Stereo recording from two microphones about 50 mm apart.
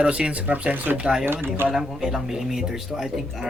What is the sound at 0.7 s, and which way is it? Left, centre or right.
Speech, right.